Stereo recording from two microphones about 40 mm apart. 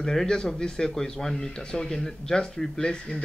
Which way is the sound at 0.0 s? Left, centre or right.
Centre.